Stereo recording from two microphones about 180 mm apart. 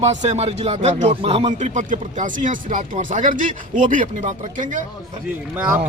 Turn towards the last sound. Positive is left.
turn(degrees=-10)  # may be behind; listen again after turning